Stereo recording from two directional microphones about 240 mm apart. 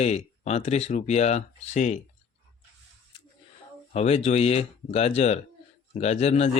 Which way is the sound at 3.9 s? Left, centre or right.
Left.